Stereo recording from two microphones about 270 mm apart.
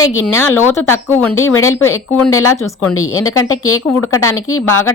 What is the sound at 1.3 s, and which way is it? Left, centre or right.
Speech, left.